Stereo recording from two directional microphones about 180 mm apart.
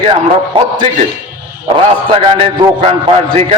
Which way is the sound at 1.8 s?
30° right (ahead or behind).